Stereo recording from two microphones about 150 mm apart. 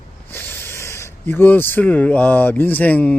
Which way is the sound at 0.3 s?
15° left (ahead or behind).